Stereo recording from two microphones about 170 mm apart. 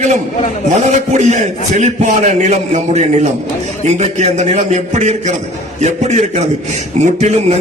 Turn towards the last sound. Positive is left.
turn(degrees=-40)  # may be behind; listen again after turning